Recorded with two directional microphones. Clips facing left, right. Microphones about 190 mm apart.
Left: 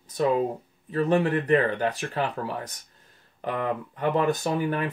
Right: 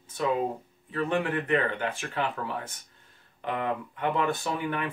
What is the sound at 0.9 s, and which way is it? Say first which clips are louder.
Speech: left 5 dB; 35° left (ahead or behind).